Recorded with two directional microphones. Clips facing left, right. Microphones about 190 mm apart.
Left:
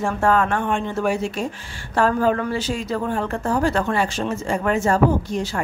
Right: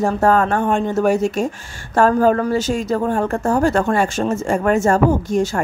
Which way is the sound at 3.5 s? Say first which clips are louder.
Right 4 dB; 45° right (ahead or behind).